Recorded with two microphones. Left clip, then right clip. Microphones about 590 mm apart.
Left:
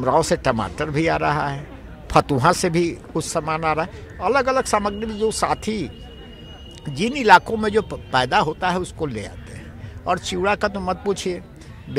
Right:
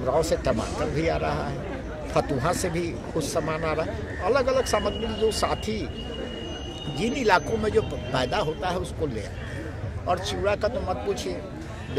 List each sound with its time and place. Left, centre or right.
0.0 s speech: left
7.0 s speech: left